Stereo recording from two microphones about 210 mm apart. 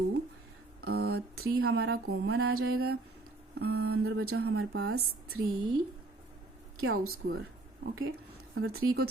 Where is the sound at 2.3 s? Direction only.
90° right.